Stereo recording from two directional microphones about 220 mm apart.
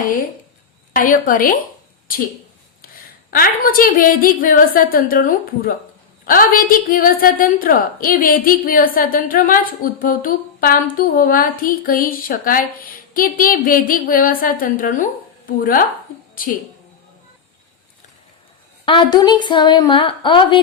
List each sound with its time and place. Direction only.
0.9 s a woman's voice: 40° left (ahead or behind)
3.2 s a woman's voice: 40° left (ahead or behind)
18.9 s a woman's voice: 20° left (ahead or behind)